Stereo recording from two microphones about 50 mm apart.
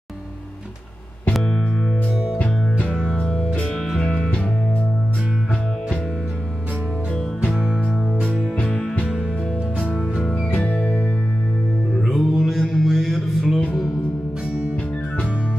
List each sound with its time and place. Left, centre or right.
3.1 s music: centre
8.6 s music: centre
12.1 s mantra: centre